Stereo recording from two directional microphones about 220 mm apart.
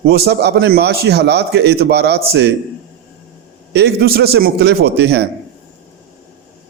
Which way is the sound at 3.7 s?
50° right (ahead or behind).